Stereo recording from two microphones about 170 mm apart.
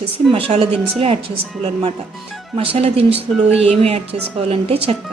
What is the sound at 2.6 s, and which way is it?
A woman's voice, 35° right (ahead or behind).